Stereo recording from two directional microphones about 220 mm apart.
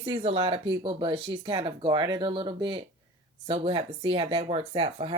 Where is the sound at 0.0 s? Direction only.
25° right (ahead or behind).